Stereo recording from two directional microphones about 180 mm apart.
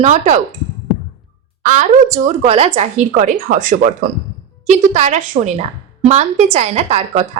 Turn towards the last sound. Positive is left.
turn(degrees=-35)  # may be behind; listen again after turning